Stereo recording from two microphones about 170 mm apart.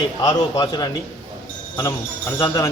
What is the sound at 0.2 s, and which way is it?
Speech, 25° left (ahead or behind).